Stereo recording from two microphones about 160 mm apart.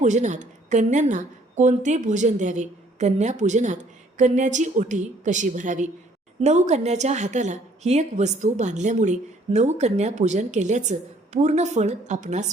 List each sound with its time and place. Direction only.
0.0 s a woman's voice: 50° right (ahead or behind)